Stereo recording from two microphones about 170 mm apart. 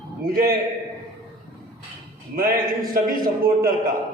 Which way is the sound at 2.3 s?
60° right (ahead or behind).